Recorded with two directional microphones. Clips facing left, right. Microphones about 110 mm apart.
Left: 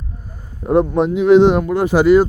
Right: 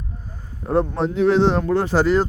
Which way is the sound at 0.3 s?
10° left (ahead or behind).